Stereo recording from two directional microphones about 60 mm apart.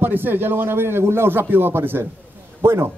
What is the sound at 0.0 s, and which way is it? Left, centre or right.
Speech, right.